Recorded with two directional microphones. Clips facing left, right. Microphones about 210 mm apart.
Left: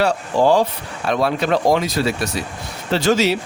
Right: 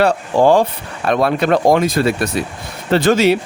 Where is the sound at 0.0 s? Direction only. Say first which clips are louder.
Right 4 dB; 55° right (ahead or behind).